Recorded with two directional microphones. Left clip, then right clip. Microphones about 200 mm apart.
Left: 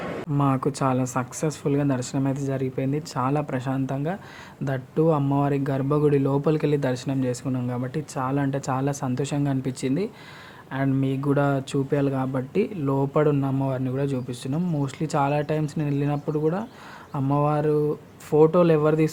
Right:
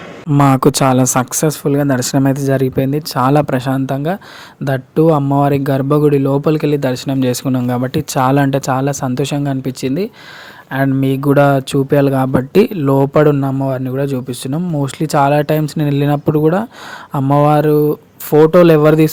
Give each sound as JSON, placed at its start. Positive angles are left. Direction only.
{"t": 0.3, "sound": "speech", "side_deg": -50}